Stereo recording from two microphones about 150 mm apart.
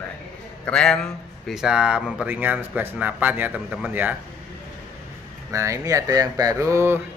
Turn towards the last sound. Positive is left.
turn(degrees=-20)  # may be behind; listen again after turning